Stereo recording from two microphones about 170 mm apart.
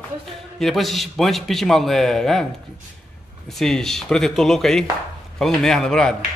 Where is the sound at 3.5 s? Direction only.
Centre (ahead or behind).